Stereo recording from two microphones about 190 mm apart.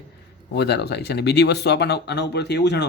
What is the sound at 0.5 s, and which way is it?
Speech, 60° left (ahead or behind).